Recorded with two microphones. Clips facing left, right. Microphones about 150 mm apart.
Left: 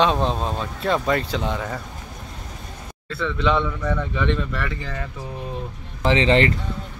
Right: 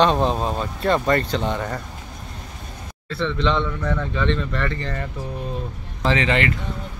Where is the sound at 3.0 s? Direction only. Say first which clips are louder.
Even; 5° left (ahead or behind).